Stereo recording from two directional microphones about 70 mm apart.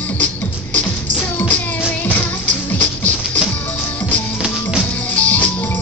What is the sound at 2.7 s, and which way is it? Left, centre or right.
Music, left.